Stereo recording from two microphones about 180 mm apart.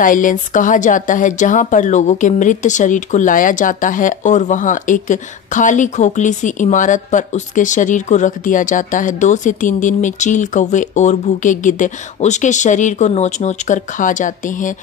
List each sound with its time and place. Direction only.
0.0 s speech: 50° left (ahead or behind)